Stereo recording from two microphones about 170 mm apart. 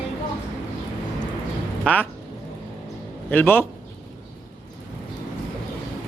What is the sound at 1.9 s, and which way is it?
Speech, 5° left (ahead or behind).